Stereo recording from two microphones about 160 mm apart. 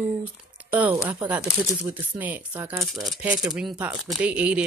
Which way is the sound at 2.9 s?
Centre (ahead or behind).